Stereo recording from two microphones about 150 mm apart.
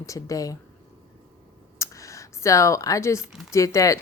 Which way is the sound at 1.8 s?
20° left (ahead or behind).